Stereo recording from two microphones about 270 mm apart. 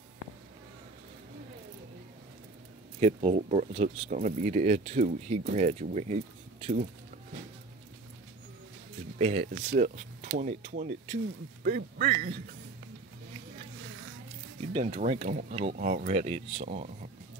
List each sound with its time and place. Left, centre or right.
3.0 s speech: right
9.2 s a man's voice: right
14.7 s speech: right